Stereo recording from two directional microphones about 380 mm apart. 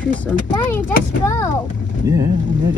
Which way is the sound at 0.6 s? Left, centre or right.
Centre.